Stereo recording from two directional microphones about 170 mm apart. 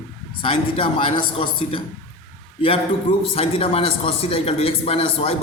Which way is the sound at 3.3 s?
35° left (ahead or behind).